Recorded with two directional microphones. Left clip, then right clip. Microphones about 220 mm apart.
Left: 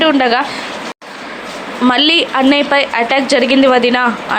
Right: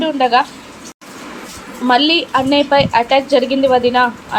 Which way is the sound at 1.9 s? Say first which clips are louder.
Left 1 dB; 25° left (ahead or behind).